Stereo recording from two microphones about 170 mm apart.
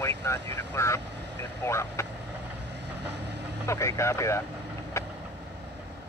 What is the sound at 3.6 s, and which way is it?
Speech, 15° left (ahead or behind).